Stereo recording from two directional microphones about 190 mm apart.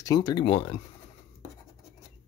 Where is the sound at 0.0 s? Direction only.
20° left (ahead or behind).